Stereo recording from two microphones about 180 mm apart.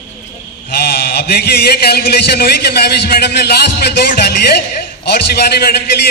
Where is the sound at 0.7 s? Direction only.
60° left (ahead or behind).